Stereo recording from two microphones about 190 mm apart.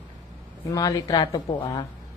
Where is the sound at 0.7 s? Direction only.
20° left (ahead or behind).